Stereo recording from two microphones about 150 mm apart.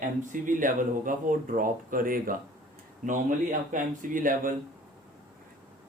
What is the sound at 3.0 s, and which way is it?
Speech, 60° right (ahead or behind).